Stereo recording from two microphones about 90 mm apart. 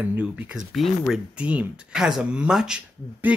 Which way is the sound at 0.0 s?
20° right (ahead or behind).